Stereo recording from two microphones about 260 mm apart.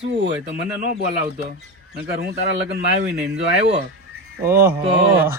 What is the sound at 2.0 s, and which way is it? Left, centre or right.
Speech, right.